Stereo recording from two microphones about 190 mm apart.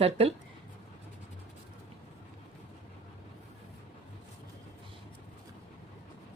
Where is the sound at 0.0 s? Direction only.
30° right (ahead or behind).